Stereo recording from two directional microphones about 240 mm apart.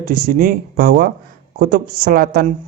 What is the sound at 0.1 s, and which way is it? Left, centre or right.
Speech, right.